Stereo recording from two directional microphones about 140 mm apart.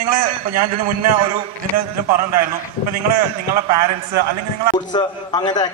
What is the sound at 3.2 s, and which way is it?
Speech, 25° right (ahead or behind).